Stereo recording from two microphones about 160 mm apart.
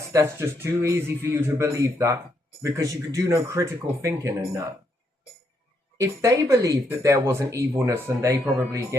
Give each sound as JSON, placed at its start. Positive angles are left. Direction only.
{"t": 0.1, "sound": "speech", "side_deg": -15}
{"t": 6.0, "sound": "speech", "side_deg": -20}